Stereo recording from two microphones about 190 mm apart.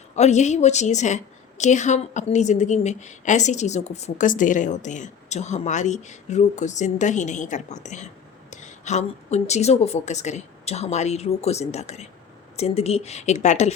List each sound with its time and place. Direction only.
0.2 s a woman's voice: 35° left (ahead or behind)